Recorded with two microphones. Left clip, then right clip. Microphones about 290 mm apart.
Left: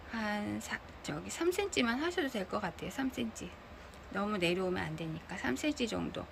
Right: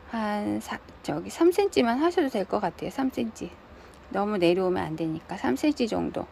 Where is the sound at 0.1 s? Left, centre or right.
Centre.